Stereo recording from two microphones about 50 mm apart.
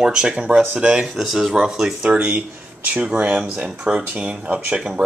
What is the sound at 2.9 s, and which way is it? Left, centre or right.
Speech, right.